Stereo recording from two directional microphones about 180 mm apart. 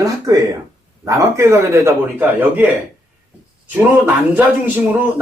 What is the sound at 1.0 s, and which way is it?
Speech, 15° right (ahead or behind).